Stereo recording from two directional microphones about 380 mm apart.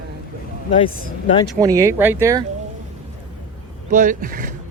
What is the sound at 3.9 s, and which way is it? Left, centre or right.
Speech, right.